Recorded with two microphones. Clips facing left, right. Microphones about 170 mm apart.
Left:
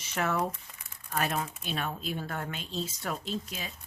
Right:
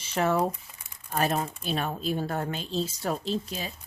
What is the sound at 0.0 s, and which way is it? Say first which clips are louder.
A woman's voice: right 5 dB; 30° right (ahead or behind).